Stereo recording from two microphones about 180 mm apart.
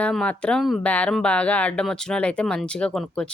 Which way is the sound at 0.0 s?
5° left (ahead or behind).